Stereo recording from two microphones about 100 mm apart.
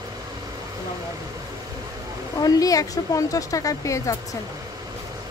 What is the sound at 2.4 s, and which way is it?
Speech, 40° left (ahead or behind).